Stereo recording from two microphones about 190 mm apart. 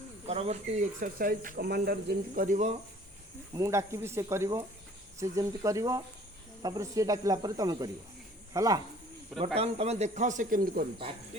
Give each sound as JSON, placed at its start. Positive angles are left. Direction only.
{"t": 0.3, "sound": "speech", "side_deg": -35}
{"t": 3.5, "sound": "speech", "side_deg": -15}
{"t": 9.6, "sound": "speech", "side_deg": -35}